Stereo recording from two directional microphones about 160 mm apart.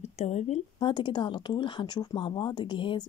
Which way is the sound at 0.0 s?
45° left (ahead or behind).